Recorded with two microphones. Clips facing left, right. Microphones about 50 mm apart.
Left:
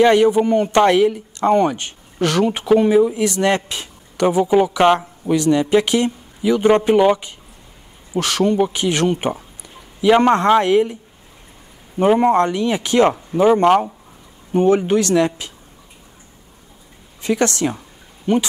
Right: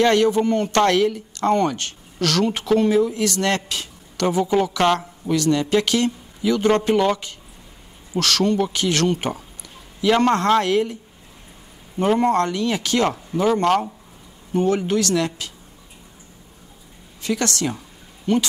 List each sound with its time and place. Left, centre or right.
0.0 s speech: centre
12.0 s speech: centre
17.2 s speech: left
17.7 s a sound: centre